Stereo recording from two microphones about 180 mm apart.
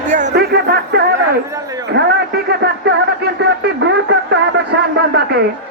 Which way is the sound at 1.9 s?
65° right (ahead or behind).